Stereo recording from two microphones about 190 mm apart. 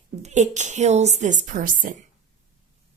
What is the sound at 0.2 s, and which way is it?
Speech, 40° right (ahead or behind).